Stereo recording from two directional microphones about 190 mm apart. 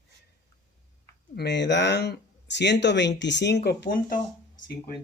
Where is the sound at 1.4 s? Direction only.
65° left (ahead or behind).